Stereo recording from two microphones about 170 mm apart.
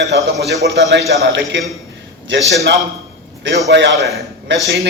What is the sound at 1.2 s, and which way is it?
Speech, 90° right.